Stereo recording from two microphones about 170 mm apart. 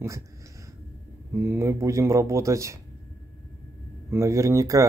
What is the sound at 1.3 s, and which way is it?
Speech, 15° right (ahead or behind).